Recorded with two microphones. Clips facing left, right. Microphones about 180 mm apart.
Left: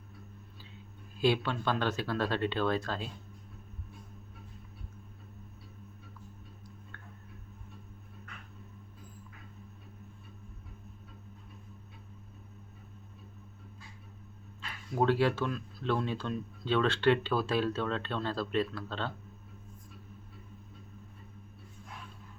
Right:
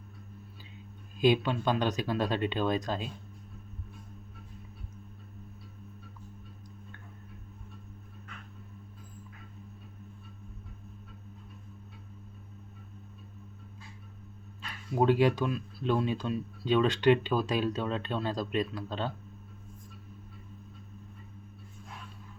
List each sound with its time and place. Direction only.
1.2 s speech: 15° right (ahead or behind)
14.9 s speech: 15° right (ahead or behind)